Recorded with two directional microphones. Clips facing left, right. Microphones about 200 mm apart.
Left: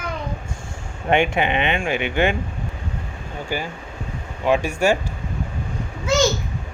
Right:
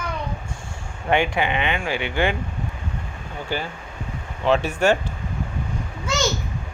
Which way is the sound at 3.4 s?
10° left (ahead or behind).